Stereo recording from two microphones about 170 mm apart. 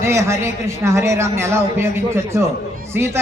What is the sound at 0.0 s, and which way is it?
A man's voice, 15° right (ahead or behind).